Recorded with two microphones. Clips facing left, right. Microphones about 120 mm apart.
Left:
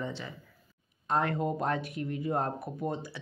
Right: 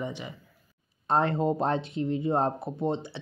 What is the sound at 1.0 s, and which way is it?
Speech, 30° right (ahead or behind).